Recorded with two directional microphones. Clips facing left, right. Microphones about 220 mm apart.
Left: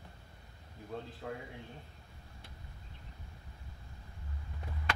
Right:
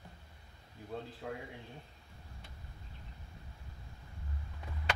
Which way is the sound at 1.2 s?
5° right (ahead or behind).